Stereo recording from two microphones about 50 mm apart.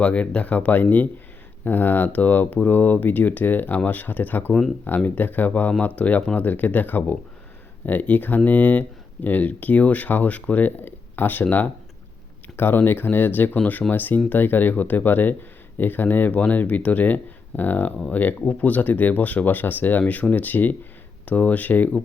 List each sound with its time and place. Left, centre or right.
0.0 s speech: left
12.5 s speech: left